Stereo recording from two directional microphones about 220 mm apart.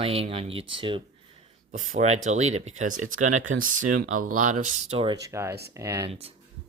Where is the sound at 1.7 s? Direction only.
35° right (ahead or behind); by 6.1 s 15° right (ahead or behind).